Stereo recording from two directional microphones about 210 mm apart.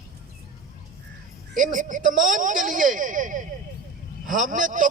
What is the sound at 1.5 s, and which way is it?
A man's voice, 40° right (ahead or behind).